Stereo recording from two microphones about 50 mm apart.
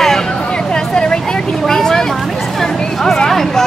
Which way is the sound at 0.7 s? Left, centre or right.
Centre.